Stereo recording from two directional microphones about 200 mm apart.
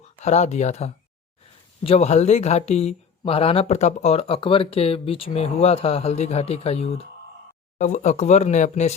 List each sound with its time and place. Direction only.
0.2 s speech: 35° left (ahead or behind)